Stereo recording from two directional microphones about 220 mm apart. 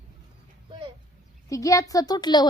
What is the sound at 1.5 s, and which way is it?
Speech, 15° left (ahead or behind).